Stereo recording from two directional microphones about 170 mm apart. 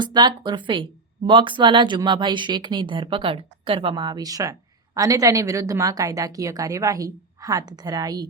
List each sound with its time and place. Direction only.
0.0 s speech: 25° right (ahead or behind)